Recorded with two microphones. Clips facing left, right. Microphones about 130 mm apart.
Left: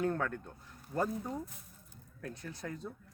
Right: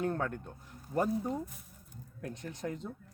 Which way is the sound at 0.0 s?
20° right (ahead or behind).